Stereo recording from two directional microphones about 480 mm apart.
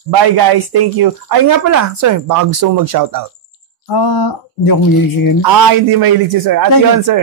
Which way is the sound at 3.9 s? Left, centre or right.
Left.